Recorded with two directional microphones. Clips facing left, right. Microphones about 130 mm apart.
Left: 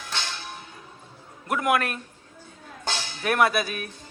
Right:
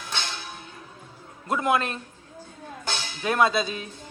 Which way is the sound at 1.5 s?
25° right (ahead or behind).